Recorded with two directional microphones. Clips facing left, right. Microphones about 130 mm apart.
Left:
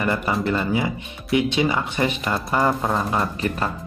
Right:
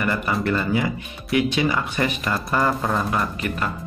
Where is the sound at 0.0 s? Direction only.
25° left (ahead or behind).